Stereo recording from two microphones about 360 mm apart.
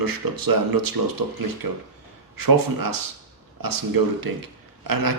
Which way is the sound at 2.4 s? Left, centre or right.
Right.